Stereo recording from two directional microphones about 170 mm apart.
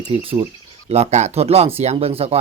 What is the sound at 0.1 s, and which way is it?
Speech, 35° right (ahead or behind).